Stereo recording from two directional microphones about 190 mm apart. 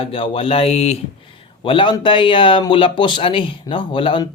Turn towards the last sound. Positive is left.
turn(degrees=25)  # may be behind; listen again after turning